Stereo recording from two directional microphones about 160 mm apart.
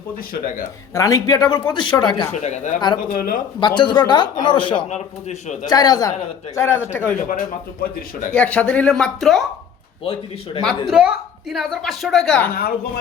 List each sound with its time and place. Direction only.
0.3 s speech: 60° left (ahead or behind)
0.9 s speech: 20° left (ahead or behind)
2.4 s a man's voice: 45° left (ahead or behind)
3.0 s speech: 60° left (ahead or behind)
3.6 s speech: 30° left (ahead or behind)
4.9 s a man's voice: 45° left (ahead or behind)
5.6 s speech: 25° left (ahead or behind)
7.3 s speech: 55° left (ahead or behind)
8.3 s a woman's voice: 5° left (ahead or behind)
10.0 s speech: 35° left (ahead or behind)
10.8 s a woman's voice: 5° right (ahead or behind)